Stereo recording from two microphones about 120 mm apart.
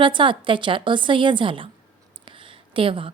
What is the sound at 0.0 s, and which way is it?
A woman's voice, 45° right (ahead or behind).